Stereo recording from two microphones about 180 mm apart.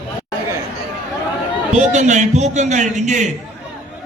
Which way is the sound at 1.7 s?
40° right (ahead or behind).